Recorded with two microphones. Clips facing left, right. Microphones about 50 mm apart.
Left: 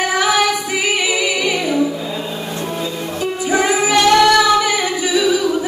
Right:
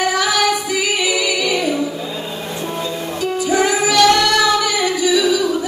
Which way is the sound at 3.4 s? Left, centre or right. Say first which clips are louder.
Left 1 dB; left.